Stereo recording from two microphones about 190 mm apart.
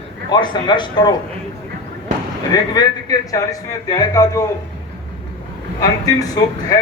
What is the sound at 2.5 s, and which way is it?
A man's voice, 20° left (ahead or behind).